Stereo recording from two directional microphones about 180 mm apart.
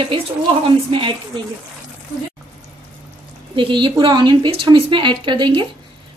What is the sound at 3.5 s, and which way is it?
A woman's voice, 25° right (ahead or behind).